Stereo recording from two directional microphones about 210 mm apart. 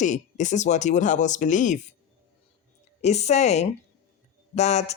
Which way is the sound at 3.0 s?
30° left (ahead or behind).